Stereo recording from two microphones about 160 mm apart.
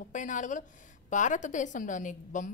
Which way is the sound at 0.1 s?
50° left (ahead or behind).